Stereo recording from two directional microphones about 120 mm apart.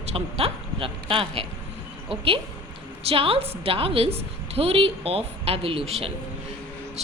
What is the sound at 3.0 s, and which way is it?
A woman's voice, 50° right (ahead or behind).